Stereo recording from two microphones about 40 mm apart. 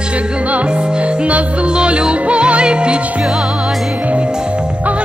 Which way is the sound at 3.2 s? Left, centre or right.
Centre.